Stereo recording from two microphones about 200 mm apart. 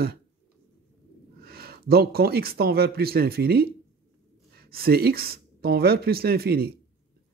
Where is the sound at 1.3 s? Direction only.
50° right (ahead or behind).